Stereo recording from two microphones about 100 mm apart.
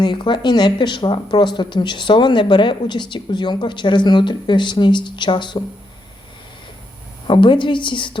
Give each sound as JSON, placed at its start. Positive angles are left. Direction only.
{"t": 0.0, "sound": "speech", "side_deg": 50}
{"t": 7.3, "sound": "a woman's voice", "side_deg": 55}